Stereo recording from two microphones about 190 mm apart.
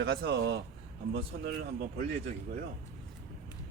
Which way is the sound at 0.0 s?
65° right (ahead or behind).